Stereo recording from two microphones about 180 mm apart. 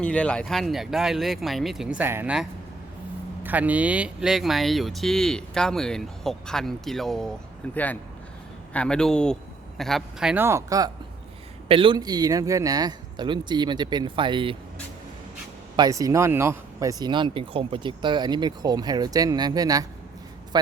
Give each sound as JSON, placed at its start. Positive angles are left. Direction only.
{"t": 0.0, "sound": "speech", "side_deg": 5}
{"t": 15.7, "sound": "speech", "side_deg": -20}